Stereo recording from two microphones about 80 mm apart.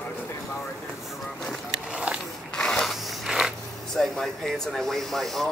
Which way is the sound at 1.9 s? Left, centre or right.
Centre.